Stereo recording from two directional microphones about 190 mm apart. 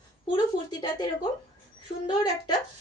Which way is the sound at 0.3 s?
25° left (ahead or behind).